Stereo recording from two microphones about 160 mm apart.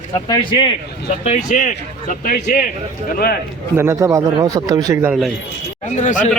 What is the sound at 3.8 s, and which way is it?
A man's voice, 20° right (ahead or behind).